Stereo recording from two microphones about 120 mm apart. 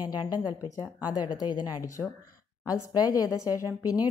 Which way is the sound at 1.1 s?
35° left (ahead or behind).